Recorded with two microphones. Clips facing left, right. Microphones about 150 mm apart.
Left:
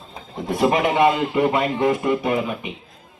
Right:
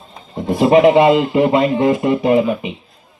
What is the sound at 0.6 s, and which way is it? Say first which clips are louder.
Speech: right 7 dB; 30° right (ahead or behind).